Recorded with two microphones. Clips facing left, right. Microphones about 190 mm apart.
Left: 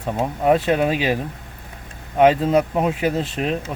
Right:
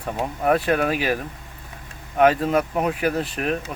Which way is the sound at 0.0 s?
20° left (ahead or behind).